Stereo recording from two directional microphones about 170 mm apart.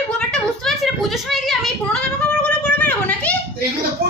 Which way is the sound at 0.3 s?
5° left (ahead or behind).